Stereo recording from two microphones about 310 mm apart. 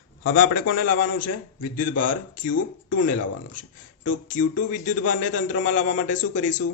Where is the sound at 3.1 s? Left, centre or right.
Left.